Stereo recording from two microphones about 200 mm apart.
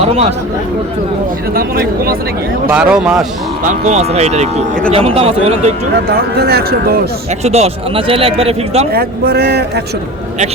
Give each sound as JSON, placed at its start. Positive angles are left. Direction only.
{"t": 0.0, "sound": "speech", "side_deg": -30}
{"t": 1.5, "sound": "speech", "side_deg": -50}
{"t": 2.6, "sound": "a man's voice", "side_deg": -5}
{"t": 3.6, "sound": "speech", "side_deg": -35}
{"t": 6.3, "sound": "speech", "side_deg": -50}
{"t": 7.3, "sound": "speech", "side_deg": -30}
{"t": 8.9, "sound": "speech", "side_deg": -50}